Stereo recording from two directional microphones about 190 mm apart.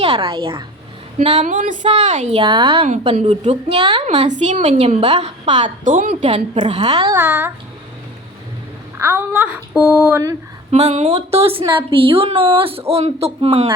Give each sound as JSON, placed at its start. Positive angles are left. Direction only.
{"t": 0.0, "sound": "a woman's voice", "side_deg": -30}
{"t": 2.4, "sound": "a woman's voice", "side_deg": -25}
{"t": 6.2, "sound": "a woman's voice", "side_deg": -30}
{"t": 9.0, "sound": "speech", "side_deg": -10}
{"t": 10.7, "sound": "a woman's voice", "side_deg": -35}